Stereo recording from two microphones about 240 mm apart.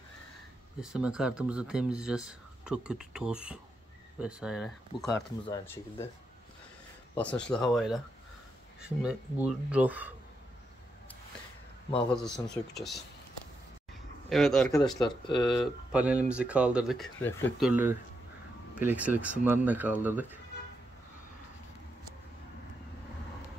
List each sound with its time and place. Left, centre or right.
0.7 s speech: centre
5.1 s speech: centre
7.2 s speech: centre
12.1 s speech: centre
14.3 s speech: centre
15.0 s speech: centre
15.4 s speech: centre
17.6 s speech: centre